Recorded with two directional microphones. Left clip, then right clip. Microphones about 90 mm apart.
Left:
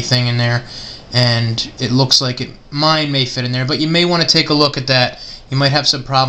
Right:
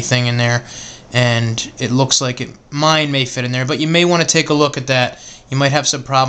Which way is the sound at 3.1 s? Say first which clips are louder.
Even; 35° right (ahead or behind).